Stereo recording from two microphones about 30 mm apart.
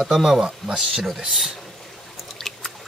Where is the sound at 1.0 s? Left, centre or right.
Centre.